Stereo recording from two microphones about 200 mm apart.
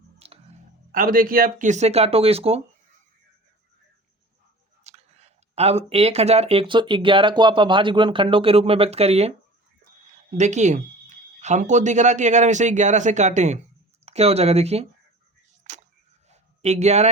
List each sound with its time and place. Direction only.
0.2 s clicking: 30° right (ahead or behind)
0.9 s speech: 45° right (ahead or behind); by 2.6 s 30° right (ahead or behind)
4.8 s speech: 35° right (ahead or behind)
10.3 s speech: 35° right (ahead or behind)
15.6 s a sound: 40° right (ahead or behind)